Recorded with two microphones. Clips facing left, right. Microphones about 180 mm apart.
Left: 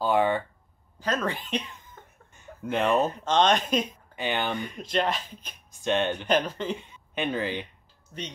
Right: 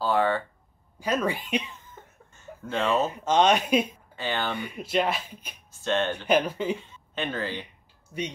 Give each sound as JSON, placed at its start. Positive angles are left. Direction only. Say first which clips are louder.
{"t": 0.0, "sound": "a sound", "louder": "left 1 dB", "side_deg": 15}
{"t": 0.9, "sound": "speech", "louder": "right 2 dB", "side_deg": -10}
{"t": 2.3, "sound": "a sound", "louder": "left 2 dB", "side_deg": 15}
{"t": 3.1, "sound": "speech", "louder": "right 1 dB", "side_deg": -10}
{"t": 4.1, "sound": "speech", "louder": "left 4 dB", "side_deg": 15}
{"t": 4.6, "sound": "speech", "louder": "right 1 dB", "side_deg": -10}
{"t": 5.7, "sound": "speech", "louder": "left 1 dB", "side_deg": 15}
{"t": 6.2, "sound": "speech", "louder": "right 2 dB", "side_deg": -10}
{"t": 6.9, "sound": "speech", "louder": "left 2 dB", "side_deg": 15}